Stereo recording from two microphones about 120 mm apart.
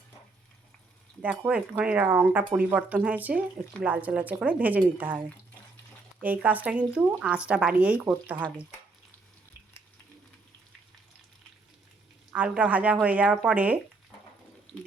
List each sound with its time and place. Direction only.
1.5 s speech: 10° right (ahead or behind)
6.2 s speech: 15° right (ahead or behind)
12.3 s speech: 10° right (ahead or behind)